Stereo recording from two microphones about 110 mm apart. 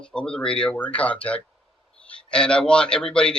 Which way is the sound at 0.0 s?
5° left (ahead or behind).